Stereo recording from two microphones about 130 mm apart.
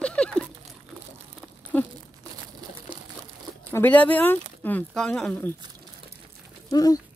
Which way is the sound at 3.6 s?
15° left (ahead or behind).